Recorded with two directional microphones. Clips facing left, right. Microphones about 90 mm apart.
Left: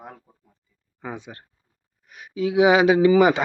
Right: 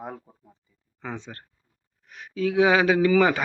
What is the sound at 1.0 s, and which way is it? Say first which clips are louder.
Speech: left 1 dB; 10° left (ahead or behind).